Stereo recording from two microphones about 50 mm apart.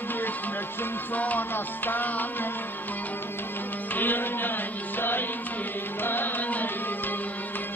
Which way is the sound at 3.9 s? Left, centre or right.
Left.